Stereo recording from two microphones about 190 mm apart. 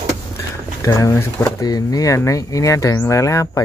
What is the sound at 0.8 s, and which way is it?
Speech, 15° left (ahead or behind).